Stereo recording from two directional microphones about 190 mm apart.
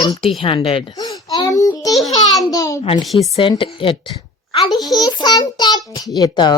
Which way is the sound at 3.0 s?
Centre (ahead or behind).